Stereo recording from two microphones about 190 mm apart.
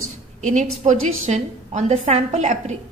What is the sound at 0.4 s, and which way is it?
A woman's voice, 40° right (ahead or behind).